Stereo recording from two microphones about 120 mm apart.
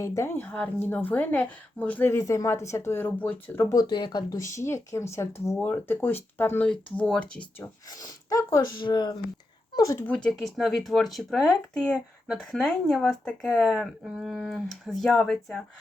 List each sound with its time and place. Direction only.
0.0 s speech: 25° left (ahead or behind)
2.1 s speech: 30° left (ahead or behind)
3.8 s speech: 40° left (ahead or behind); by 7.4 s 10° left (ahead or behind)
7.6 s speech: 30° left (ahead or behind)
10.1 s speech: 5° left (ahead or behind)